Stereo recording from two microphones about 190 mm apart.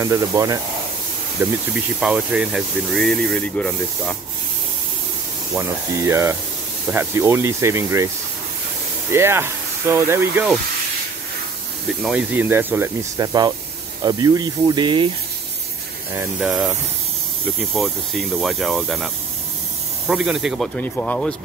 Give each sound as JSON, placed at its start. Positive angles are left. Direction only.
{"t": 0.0, "sound": "speech", "side_deg": -15}
{"t": 1.4, "sound": "speech", "side_deg": -5}
{"t": 5.5, "sound": "speech", "side_deg": -15}
{"t": 9.1, "sound": "speech", "side_deg": -15}
{"t": 12.0, "sound": "speech", "side_deg": -5}
{"t": 16.2, "sound": "speech", "side_deg": -5}
{"t": 20.1, "sound": "speech", "side_deg": -5}